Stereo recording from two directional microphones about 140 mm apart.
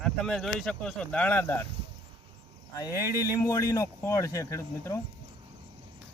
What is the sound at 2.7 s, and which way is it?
Speech, 25° left (ahead or behind).